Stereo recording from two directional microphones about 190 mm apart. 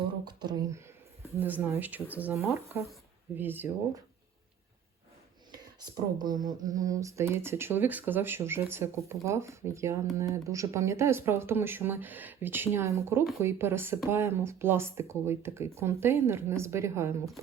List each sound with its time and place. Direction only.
0.3 s speech: 20° right (ahead or behind)
1.4 s speech: 10° right (ahead or behind)
6.7 s speech: 20° right (ahead or behind)